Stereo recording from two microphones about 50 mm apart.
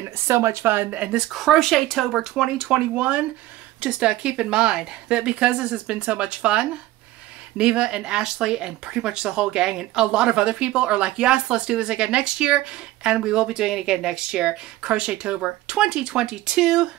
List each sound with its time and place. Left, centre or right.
0.3 s speech: right
0.9 s speech: right
1.3 s speech: centre
2.3 s speech: centre
3.0 s speech: right